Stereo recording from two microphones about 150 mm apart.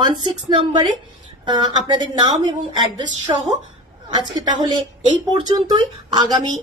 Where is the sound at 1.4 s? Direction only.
30° right (ahead or behind).